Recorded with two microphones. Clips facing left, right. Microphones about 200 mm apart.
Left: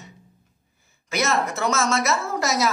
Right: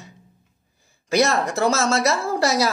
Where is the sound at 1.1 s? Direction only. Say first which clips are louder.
Right 4 dB; 35° right (ahead or behind).